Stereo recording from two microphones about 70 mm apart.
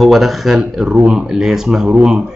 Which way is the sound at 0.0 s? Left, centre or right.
Centre.